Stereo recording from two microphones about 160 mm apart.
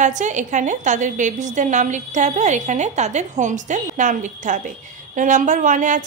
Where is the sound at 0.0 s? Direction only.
50° right (ahead or behind).